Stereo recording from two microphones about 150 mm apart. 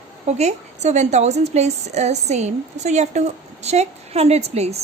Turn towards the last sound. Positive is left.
turn(degrees=-45)  # may be behind; listen again after turning